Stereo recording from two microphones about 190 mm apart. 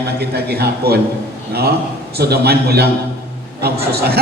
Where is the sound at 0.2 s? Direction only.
60° right (ahead or behind).